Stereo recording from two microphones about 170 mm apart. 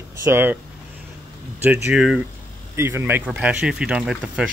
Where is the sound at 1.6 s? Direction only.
10° right (ahead or behind).